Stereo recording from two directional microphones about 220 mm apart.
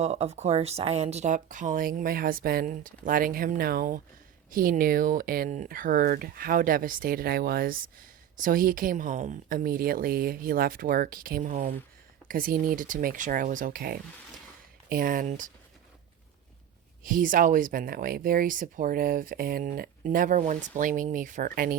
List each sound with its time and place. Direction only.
0.0 s speech: 30° right (ahead or behind)
17.0 s speech: 40° right (ahead or behind)